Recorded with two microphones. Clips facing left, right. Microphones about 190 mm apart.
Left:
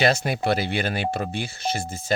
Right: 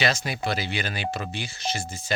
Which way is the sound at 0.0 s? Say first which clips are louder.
Left 5 dB; 55° left (ahead or behind).